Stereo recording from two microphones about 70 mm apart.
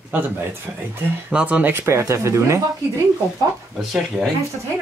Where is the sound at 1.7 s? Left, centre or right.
Right.